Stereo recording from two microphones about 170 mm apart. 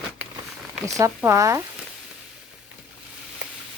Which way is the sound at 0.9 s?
20° right (ahead or behind).